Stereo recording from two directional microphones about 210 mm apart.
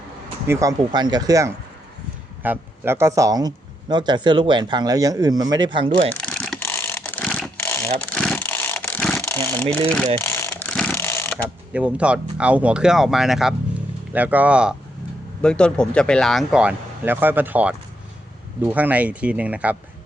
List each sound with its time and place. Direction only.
0.4 s speech: 15° right (ahead or behind)
6.2 s mechanisms: centre (ahead or behind)
7.9 s vehicle: 5° left (ahead or behind)
10.2 s mechanisms: 10° left (ahead or behind)
11.4 s speech: 5° right (ahead or behind)